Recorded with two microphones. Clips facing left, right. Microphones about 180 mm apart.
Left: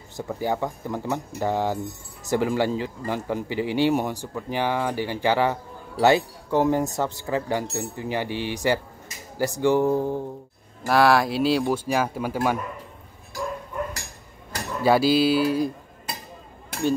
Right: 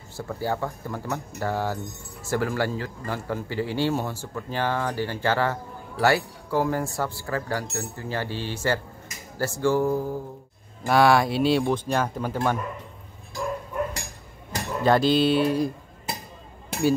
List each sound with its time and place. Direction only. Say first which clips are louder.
0.1 s speech: left 2 dB; 15° left (ahead or behind)
10.9 s speech: even; centre (ahead or behind)
14.8 s speech: left 1 dB; 5° left (ahead or behind)